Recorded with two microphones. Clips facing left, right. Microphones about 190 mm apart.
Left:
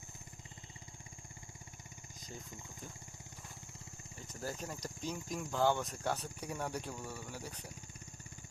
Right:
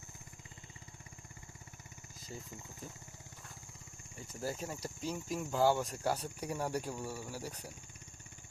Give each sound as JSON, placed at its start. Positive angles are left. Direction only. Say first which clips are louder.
{"t": 4.3, "sound": "speech", "louder": "right 3 dB", "side_deg": -5}